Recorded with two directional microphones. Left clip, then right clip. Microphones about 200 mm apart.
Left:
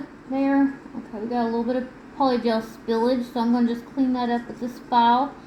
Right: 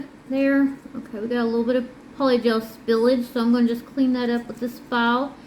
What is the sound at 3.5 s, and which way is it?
Speech, 25° right (ahead or behind).